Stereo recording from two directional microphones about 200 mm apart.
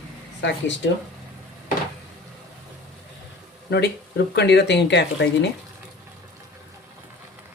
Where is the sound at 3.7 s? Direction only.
55° left (ahead or behind).